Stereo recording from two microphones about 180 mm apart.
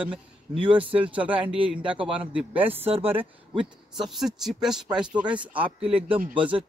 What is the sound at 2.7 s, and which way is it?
Speech, 30° right (ahead or behind).